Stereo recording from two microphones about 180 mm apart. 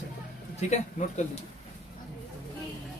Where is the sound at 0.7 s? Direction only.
40° left (ahead or behind).